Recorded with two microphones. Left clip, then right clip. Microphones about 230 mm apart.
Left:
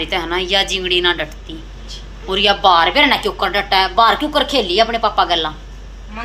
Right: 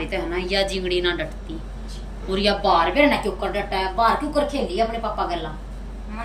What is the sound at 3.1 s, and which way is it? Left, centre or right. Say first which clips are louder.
A woman's voice: left 7 dB; left.